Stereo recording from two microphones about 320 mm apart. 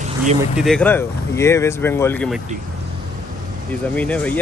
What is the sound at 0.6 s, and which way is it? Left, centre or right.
Speech, centre.